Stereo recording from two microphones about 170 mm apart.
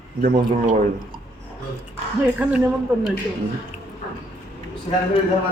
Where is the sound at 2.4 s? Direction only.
10° right (ahead or behind).